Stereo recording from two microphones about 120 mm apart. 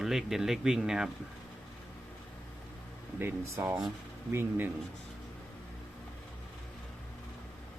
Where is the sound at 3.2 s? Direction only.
20° right (ahead or behind).